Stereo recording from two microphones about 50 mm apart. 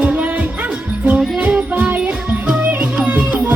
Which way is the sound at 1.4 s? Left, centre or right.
Right.